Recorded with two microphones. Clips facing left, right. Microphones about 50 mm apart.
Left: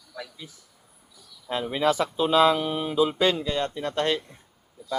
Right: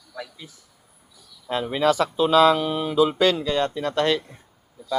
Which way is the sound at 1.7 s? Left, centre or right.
Right.